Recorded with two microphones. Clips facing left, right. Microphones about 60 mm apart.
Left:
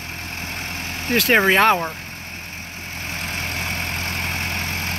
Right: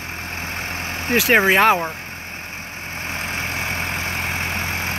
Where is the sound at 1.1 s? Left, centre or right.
Centre.